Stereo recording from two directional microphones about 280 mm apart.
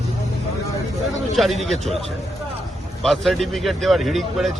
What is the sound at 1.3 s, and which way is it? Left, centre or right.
Speech, centre.